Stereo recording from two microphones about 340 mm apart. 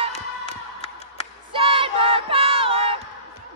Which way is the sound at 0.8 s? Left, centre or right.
Centre.